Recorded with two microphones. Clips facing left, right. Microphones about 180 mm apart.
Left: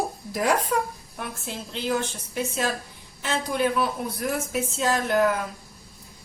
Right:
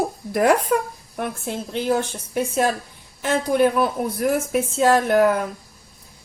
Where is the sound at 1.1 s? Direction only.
55° right (ahead or behind).